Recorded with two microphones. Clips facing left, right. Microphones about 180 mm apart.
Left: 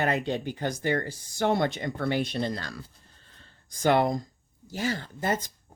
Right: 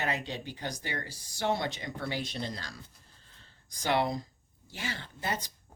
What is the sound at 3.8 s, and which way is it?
Speech, 50° left (ahead or behind).